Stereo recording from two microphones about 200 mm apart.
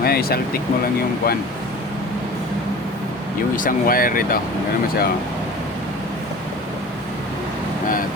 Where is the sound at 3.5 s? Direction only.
45° left (ahead or behind).